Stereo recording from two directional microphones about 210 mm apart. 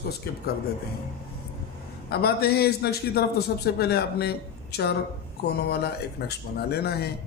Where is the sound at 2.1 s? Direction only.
50° left (ahead or behind).